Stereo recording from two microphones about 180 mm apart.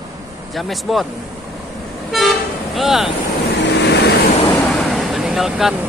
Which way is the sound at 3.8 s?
70° left (ahead or behind).